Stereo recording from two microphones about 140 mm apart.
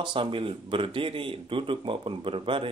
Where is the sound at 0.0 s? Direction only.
35° right (ahead or behind).